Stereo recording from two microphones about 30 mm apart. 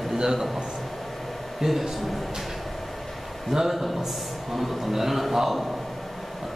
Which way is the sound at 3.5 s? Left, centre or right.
Centre.